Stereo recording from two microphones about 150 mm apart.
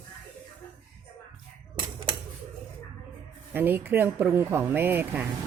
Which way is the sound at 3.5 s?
15° right (ahead or behind).